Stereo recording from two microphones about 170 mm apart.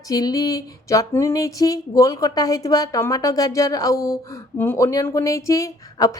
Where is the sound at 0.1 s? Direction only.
20° left (ahead or behind).